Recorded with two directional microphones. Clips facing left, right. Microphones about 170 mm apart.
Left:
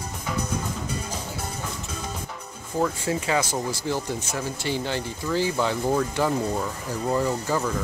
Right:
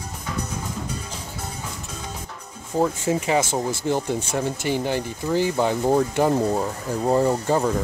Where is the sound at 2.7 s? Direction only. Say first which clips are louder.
Right 3 dB; 25° right (ahead or behind).